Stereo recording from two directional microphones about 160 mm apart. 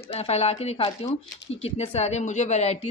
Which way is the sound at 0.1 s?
40° left (ahead or behind).